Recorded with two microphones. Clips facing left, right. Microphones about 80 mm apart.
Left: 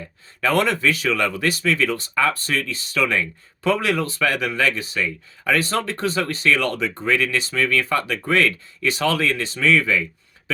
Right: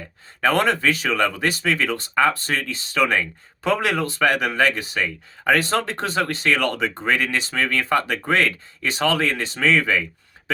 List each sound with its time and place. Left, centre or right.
0.4 s speech: right